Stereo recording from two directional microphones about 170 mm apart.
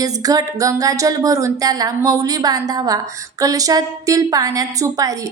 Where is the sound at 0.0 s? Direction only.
20° right (ahead or behind).